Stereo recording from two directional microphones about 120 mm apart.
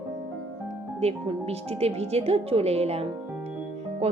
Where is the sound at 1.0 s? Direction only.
60° right (ahead or behind).